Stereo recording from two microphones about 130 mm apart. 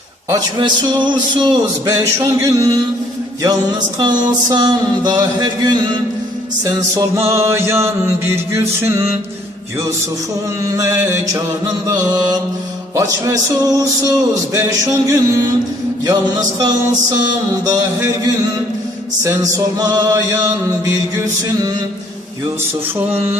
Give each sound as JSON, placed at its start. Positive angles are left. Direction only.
{"t": 0.3, "sound": "music", "side_deg": -30}
{"t": 1.9, "sound": "music", "side_deg": -20}
{"t": 4.0, "sound": "music", "side_deg": -30}
{"t": 7.3, "sound": "music", "side_deg": -20}
{"t": 10.7, "sound": "music", "side_deg": -25}
{"t": 13.0, "sound": "music", "side_deg": -25}
{"t": 19.2, "sound": "music", "side_deg": -25}
{"t": 23.0, "sound": "a sound", "side_deg": -15}